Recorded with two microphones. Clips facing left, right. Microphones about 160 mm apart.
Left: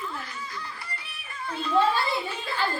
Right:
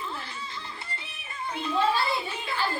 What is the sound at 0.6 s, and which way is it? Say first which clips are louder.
Music: left 1 dB; 25° right (ahead or behind).